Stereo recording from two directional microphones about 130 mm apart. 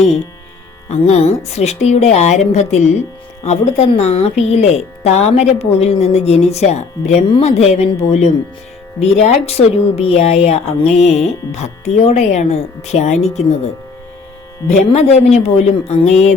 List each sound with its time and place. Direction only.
0.9 s speech: 60° left (ahead or behind)
7.3 s speech: 50° left (ahead or behind)
14.7 s speech: 60° left (ahead or behind)